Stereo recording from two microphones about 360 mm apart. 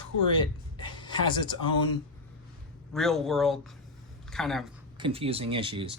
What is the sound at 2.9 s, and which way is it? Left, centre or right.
Speech, centre.